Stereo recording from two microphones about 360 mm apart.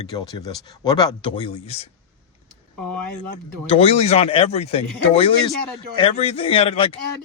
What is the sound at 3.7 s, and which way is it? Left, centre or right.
Speech, centre.